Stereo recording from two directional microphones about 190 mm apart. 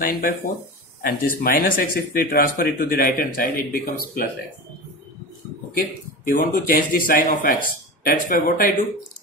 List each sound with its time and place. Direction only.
0.0 s speech: 50° left (ahead or behind)
6.3 s speech: 50° left (ahead or behind)